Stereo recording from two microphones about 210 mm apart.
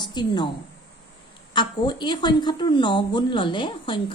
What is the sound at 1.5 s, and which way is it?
Speech, 20° left (ahead or behind).